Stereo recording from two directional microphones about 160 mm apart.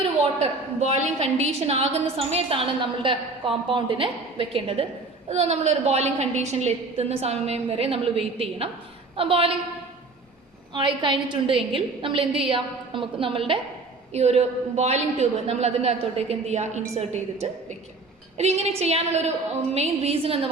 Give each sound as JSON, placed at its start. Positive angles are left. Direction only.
{"t": 0.8, "sound": "a woman's voice", "side_deg": -40}
{"t": 10.8, "sound": "a woman's voice", "side_deg": -30}
{"t": 18.3, "sound": "a woman's voice", "side_deg": -40}